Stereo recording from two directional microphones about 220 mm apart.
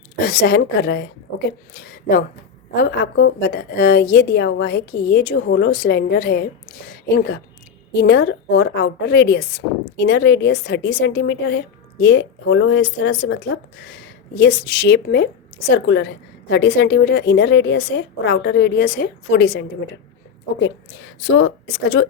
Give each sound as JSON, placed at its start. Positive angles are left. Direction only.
{"t": 0.2, "sound": "a woman's voice", "side_deg": 45}
{"t": 7.9, "sound": "a woman's voice", "side_deg": 50}
{"t": 21.2, "sound": "speech", "side_deg": 60}